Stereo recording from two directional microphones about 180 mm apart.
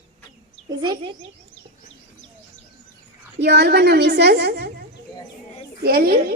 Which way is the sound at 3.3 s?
65° right (ahead or behind).